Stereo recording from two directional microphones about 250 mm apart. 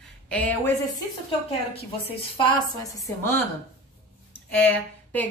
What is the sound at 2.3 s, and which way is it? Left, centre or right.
Speech, centre.